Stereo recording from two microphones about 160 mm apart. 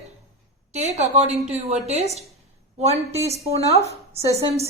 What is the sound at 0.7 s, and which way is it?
A woman's voice, 45° right (ahead or behind).